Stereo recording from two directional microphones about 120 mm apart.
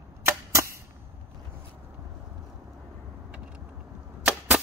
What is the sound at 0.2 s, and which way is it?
Arrow, 25° right (ahead or behind).